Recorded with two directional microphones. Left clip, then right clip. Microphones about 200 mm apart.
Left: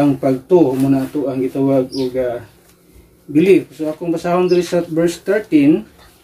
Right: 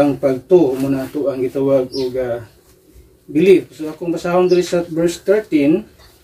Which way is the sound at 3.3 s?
25° left (ahead or behind).